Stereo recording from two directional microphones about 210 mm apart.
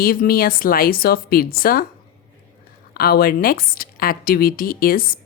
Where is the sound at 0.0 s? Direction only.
45° left (ahead or behind).